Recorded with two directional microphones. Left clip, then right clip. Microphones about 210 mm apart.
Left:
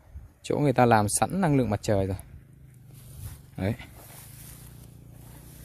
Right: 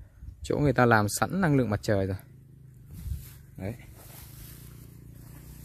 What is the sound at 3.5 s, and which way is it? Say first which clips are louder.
Speech: left 7 dB; 45° left (ahead or behind).